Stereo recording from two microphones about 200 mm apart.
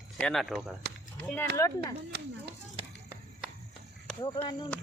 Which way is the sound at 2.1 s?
55° right (ahead or behind).